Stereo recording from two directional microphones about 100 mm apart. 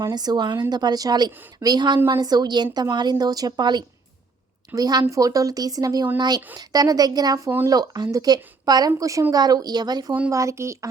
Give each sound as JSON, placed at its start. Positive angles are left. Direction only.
{"t": 0.0, "sound": "a woman's voice", "side_deg": -40}
{"t": 10.1, "sound": "speech", "side_deg": -15}
{"t": 10.3, "sound": "speech", "side_deg": -30}